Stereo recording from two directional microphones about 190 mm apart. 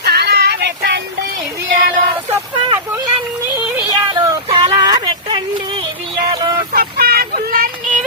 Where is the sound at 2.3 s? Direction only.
10° right (ahead or behind).